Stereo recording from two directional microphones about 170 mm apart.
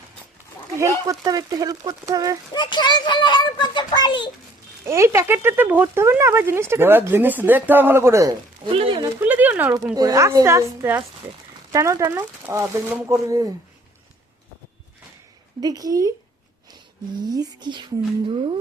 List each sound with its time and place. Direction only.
0.8 s speech: 20° right (ahead or behind)
2.5 s a child's voice: 25° left (ahead or behind)
4.9 s speech: 15° right (ahead or behind)
8.7 s speech: 30° right (ahead or behind)
9.2 s speech: 10° right (ahead or behind)
15.6 s speech: 20° right (ahead or behind)
17.2 s speech: 25° right (ahead or behind)